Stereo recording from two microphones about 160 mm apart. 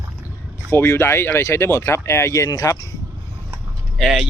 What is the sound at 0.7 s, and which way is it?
Speech, 15° left (ahead or behind).